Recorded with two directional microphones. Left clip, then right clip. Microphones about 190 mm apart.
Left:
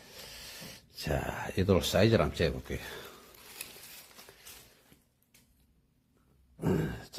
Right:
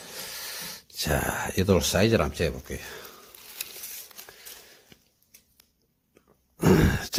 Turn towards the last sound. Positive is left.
turn(degrees=-50)  # may be behind; listen again after turning